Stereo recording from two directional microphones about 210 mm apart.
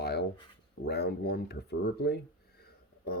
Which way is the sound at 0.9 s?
50° left (ahead or behind).